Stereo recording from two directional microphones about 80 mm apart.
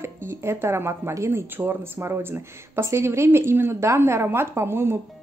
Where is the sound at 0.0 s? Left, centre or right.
Right.